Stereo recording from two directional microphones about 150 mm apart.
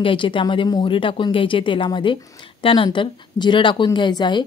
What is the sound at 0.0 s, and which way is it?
A woman's voice, 35° left (ahead or behind).